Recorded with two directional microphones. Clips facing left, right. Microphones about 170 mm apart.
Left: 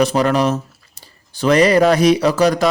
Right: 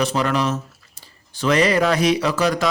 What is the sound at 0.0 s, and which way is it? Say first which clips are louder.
Speech: left 5 dB; 40° left (ahead or behind).